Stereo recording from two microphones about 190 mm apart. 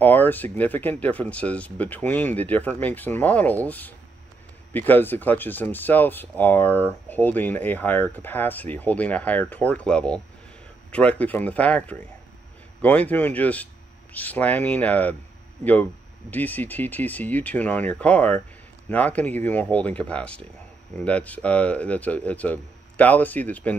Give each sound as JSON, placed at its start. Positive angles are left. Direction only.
{"t": 0.0, "sound": "speech", "side_deg": 10}